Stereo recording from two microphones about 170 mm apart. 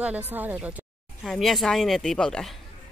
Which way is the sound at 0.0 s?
10° right (ahead or behind).